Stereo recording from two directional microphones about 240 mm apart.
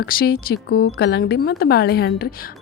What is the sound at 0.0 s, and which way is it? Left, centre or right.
A woman's voice, left.